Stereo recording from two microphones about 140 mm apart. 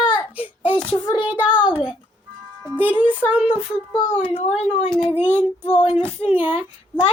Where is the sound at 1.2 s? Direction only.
10° right (ahead or behind).